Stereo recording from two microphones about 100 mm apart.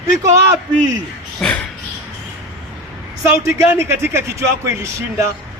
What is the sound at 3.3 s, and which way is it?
A man's voice, 25° right (ahead or behind).